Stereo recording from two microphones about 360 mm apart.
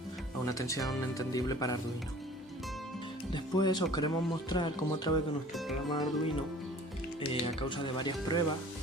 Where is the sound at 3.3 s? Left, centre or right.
Centre.